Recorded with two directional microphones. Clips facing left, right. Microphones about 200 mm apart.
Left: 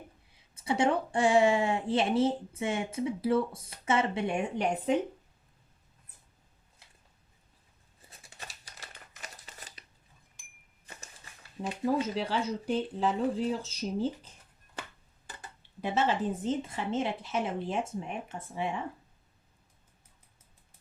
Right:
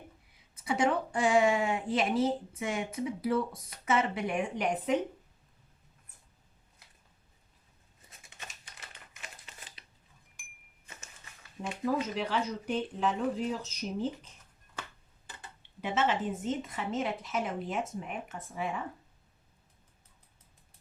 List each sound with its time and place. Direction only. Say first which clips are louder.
0.6 s speech: left 1 dB; 30° left (ahead or behind)
8.1 s crumpling: left 2 dB; 35° left (ahead or behind)
11.6 s speech: left 2 dB; 30° left (ahead or behind)
15.8 s speech: left 1 dB; 35° left (ahead or behind)